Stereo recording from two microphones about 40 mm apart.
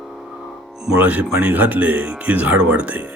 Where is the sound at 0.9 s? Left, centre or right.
Right.